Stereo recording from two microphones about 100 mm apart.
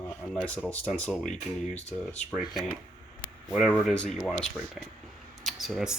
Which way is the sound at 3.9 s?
5° left (ahead or behind).